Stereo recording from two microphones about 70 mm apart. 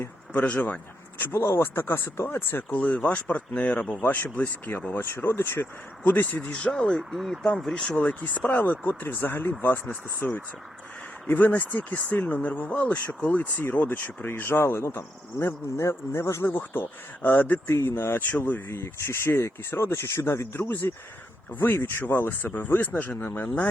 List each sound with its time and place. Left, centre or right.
0.4 s speech: left
1.2 s speech: left; by 7.9 s centre
7.9 s speech: centre; by 16.5 s left
16.5 s speech: left
17.7 s speech: left
18.7 s speech: left